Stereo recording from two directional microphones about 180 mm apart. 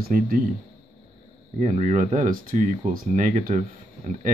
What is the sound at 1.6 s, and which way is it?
Speech, 40° right (ahead or behind).